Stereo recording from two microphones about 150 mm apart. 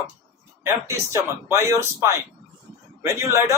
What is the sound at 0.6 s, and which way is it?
Speech, 20° right (ahead or behind).